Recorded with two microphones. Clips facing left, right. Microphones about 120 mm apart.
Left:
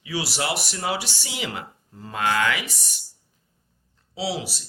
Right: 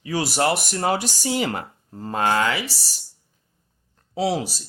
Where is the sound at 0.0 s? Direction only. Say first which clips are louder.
Right 6 dB; 45° right (ahead or behind).